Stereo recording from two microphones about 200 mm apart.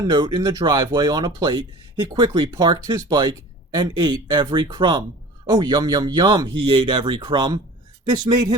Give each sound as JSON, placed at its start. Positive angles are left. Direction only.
{"t": 0.0, "sound": "speech", "side_deg": -20}